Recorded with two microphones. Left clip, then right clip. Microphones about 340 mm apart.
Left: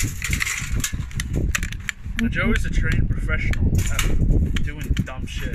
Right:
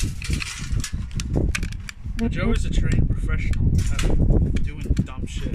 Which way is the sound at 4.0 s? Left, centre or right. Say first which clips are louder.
Right 5 dB; right.